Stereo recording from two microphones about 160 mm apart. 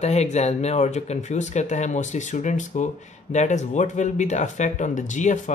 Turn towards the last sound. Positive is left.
turn(degrees=50)  # may be behind; listen again after turning